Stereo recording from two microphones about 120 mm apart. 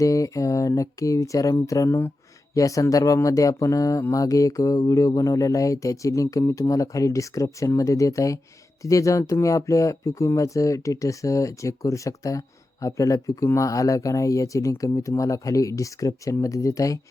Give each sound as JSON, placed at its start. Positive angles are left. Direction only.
{"t": 0.0, "sound": "speech", "side_deg": 30}